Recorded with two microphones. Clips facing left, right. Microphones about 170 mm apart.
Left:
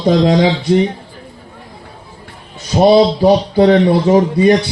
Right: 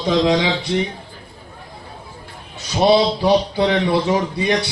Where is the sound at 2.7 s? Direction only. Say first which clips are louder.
Left 6 dB; 45° left (ahead or behind).